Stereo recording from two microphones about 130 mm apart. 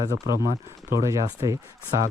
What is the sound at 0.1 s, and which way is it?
Speech, 25° right (ahead or behind).